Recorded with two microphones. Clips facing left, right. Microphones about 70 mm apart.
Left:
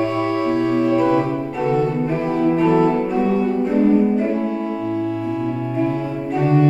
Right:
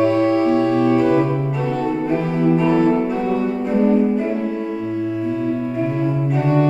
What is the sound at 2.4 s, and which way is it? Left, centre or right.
Music, centre.